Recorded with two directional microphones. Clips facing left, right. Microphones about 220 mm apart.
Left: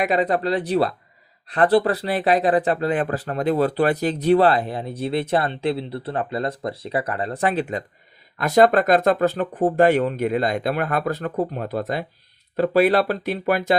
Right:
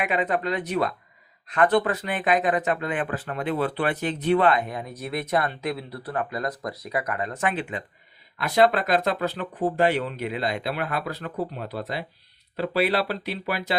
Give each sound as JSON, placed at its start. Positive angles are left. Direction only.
{"t": 0.0, "sound": "speech", "side_deg": 35}